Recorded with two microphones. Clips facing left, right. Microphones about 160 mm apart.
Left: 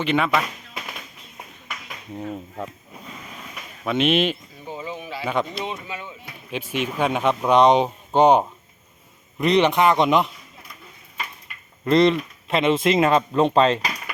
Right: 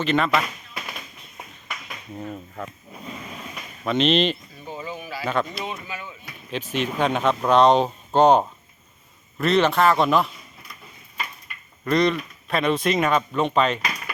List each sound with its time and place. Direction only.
0.0 s speech: 10° left (ahead or behind)
3.8 s speech: 10° left (ahead or behind); by 6.1 s 25° left (ahead or behind)
6.5 s speech: 10° left (ahead or behind)
11.9 s speech: 25° left (ahead or behind)